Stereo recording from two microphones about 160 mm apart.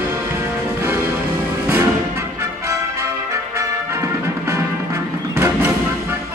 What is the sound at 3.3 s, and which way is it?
Music, 20° right (ahead or behind).